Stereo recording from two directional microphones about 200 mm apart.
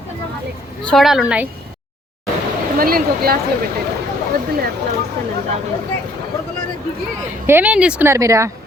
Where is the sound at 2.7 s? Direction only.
45° right (ahead or behind).